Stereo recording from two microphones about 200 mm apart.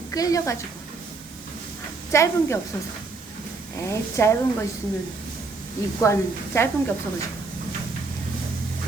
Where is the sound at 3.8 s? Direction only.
15° left (ahead or behind).